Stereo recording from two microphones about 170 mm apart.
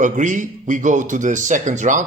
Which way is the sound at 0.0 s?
50° right (ahead or behind).